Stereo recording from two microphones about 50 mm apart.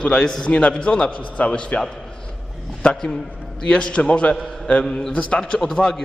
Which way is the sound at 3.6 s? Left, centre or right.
Centre.